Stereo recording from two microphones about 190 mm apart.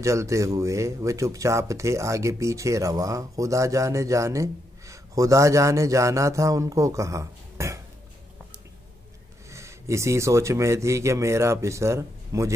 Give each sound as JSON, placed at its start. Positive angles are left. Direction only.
{"t": 0.0, "sound": "speech", "side_deg": -15}
{"t": 9.5, "sound": "speech", "side_deg": -15}